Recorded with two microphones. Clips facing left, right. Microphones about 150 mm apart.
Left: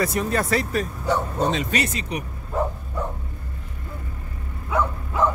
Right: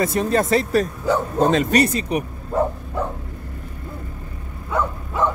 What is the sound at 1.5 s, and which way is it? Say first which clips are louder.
Speech: right 7 dB; 45° right (ahead or behind).